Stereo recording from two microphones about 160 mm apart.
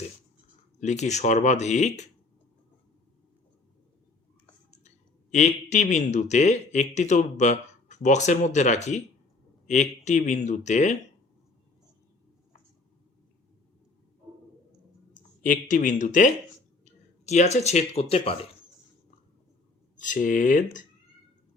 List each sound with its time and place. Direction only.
0.8 s speech: 45° left (ahead or behind)
5.3 s speech: 45° left (ahead or behind)
15.1 s speech: 55° left (ahead or behind); by 18.4 s 35° left (ahead or behind)
20.0 s speech: 55° left (ahead or behind)